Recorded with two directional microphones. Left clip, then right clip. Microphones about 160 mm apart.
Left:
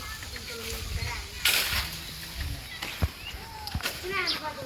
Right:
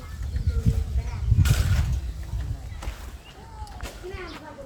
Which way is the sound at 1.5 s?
65° right (ahead or behind).